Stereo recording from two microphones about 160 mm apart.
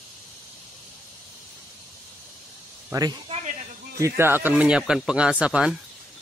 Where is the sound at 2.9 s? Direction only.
20° right (ahead or behind).